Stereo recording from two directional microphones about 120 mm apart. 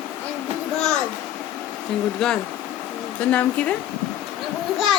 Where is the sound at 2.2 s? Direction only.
5° left (ahead or behind).